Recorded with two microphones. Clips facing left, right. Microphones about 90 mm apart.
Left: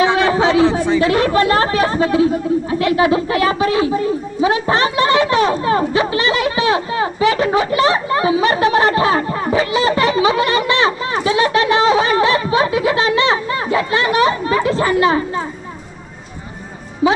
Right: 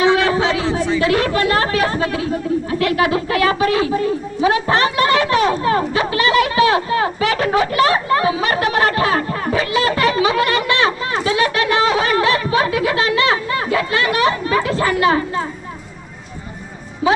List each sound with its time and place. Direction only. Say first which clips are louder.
0.0 s speech: left 1 dB; 25° left (ahead or behind)
4.4 s a sound: even; 25° left (ahead or behind)
17.0 s music: left 1 dB; 25° left (ahead or behind)